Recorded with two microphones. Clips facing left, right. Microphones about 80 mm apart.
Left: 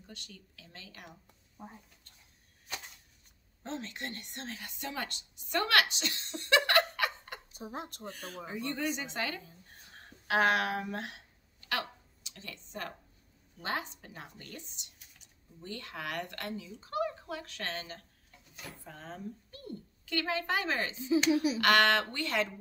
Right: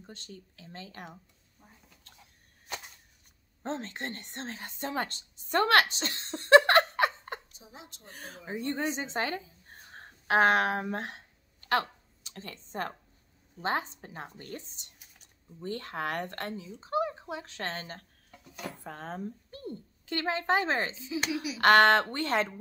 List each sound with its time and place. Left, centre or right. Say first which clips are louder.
0.0 s speech: right 4 dB; right
1.6 s speech: left 11 dB; left
3.6 s a woman's voice: right 4 dB; right
7.5 s speech: left 9 dB; left
8.1 s a woman's voice: right 6 dB; right
18.9 s speech: right 5 dB; right
19.5 s a woman's voice: right 4 dB; right
21.3 s speech: left 6 dB; left
21.5 s speech: right 10 dB; right